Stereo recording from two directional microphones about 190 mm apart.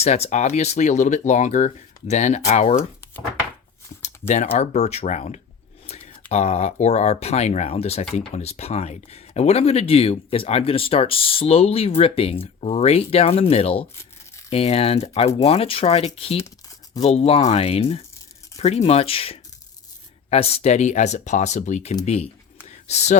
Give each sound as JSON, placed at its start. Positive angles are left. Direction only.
{"t": 0.0, "sound": "speech", "side_deg": 35}
{"t": 4.5, "sound": "speech", "side_deg": 35}
{"t": 22.6, "sound": "a sound", "side_deg": 35}